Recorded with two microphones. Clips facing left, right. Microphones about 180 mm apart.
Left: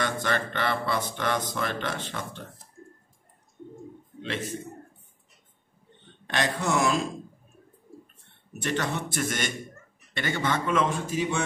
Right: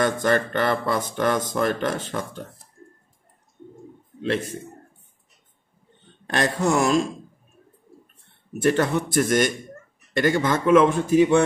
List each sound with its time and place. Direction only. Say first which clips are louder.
0.0 s speech: right 7 dB; 45° right (ahead or behind)
6.3 s speech: right 5 dB; 40° right (ahead or behind)
8.6 s a man's voice: right 9 dB; 50° right (ahead or behind)